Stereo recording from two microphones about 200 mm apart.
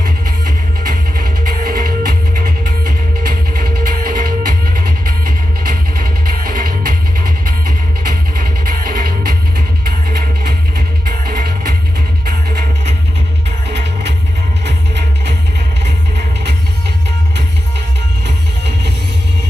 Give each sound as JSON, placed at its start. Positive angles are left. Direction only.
{"t": 0.9, "sound": "music", "side_deg": -45}
{"t": 16.1, "sound": "music", "side_deg": -55}